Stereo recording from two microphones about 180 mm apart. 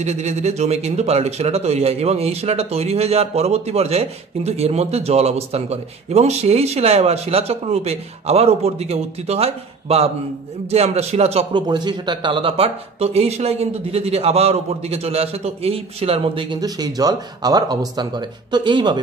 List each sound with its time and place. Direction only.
0.0 s speech: 40° right (ahead or behind)
11.6 s speech: 25° right (ahead or behind)